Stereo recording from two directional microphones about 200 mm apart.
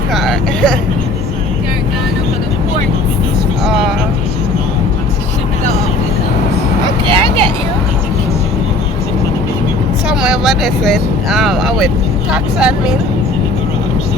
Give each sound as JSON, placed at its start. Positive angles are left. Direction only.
{"t": 0.1, "sound": "vehicle", "side_deg": 0}
{"t": 7.1, "sound": "vehicle", "side_deg": -25}
{"t": 10.1, "sound": "speech", "side_deg": -5}